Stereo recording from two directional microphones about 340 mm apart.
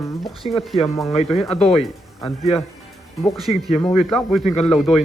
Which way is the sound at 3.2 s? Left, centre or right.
Centre.